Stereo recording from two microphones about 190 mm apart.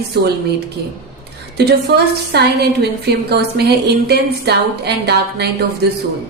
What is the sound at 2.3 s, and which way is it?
A woman's voice, 60° right (ahead or behind).